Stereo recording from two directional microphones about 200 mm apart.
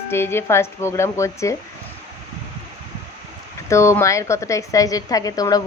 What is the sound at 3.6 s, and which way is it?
A woman's voice, 15° left (ahead or behind).